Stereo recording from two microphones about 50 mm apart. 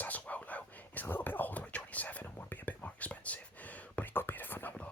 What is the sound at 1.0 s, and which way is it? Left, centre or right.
Whispering, left.